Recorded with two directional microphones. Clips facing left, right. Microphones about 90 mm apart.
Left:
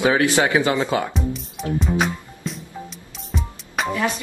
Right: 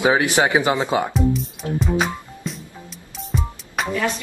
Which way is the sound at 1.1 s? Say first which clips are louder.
Right 6 dB; centre (ahead or behind).